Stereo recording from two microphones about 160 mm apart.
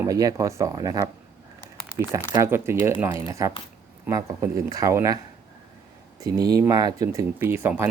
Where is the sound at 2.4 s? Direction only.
15° right (ahead or behind).